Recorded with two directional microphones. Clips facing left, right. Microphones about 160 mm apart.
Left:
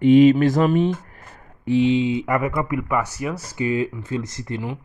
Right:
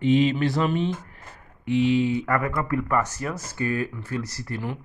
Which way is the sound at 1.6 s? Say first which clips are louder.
Left 3 dB; 30° left (ahead or behind).